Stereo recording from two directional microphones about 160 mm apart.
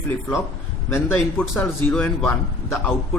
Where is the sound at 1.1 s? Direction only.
5° left (ahead or behind).